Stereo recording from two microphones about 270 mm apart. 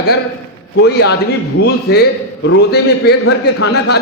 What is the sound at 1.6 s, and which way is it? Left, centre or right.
A man's voice, left.